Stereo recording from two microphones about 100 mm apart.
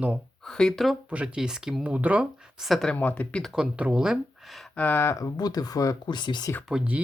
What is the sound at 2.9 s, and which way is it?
Speech, 15° left (ahead or behind).